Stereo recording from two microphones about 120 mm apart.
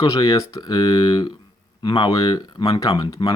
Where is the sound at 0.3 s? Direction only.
30° left (ahead or behind).